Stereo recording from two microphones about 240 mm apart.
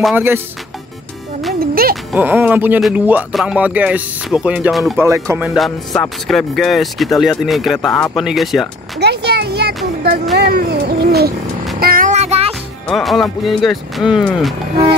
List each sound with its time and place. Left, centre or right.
0.0 s speech: centre
1.6 s a sound: right
2.1 s speech: centre
9.0 s a sound: right
11.8 s child singing: right
12.8 s speech: centre